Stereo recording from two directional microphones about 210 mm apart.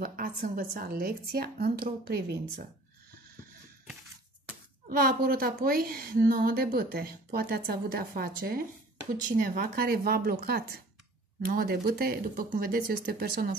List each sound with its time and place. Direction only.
0.0 s a woman's voice: 45° right (ahead or behind)
4.8 s a woman's voice: 45° right (ahead or behind)